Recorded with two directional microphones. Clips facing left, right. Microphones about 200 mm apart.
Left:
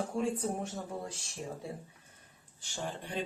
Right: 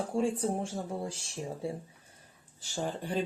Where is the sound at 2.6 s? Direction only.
40° right (ahead or behind).